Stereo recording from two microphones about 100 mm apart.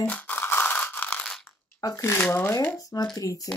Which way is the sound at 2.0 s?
25° left (ahead or behind).